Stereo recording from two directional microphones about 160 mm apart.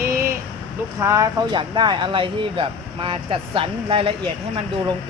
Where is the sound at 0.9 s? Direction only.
20° right (ahead or behind).